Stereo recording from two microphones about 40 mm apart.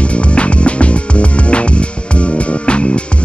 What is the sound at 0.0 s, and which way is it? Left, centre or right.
Music, left.